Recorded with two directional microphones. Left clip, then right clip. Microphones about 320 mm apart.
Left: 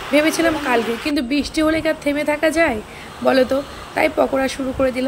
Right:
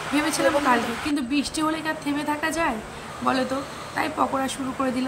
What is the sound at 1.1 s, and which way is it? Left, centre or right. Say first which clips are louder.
A woman's voice: left 6 dB; centre.